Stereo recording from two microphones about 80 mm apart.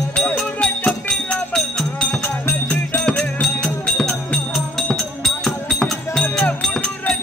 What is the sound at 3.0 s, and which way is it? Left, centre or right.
Music, centre.